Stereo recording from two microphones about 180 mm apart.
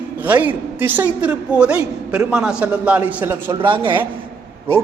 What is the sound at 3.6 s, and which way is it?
Speech, 25° right (ahead or behind).